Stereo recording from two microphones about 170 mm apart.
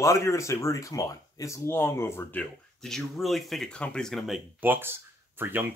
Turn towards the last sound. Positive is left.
turn(degrees=-10)  # may be behind; listen again after turning